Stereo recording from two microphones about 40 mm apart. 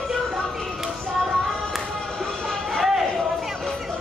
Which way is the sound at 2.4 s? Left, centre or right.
Centre.